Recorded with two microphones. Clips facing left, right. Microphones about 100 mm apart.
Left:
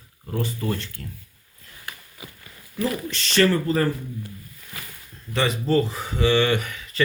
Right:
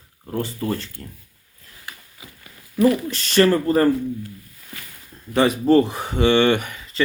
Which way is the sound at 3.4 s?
40° right (ahead or behind).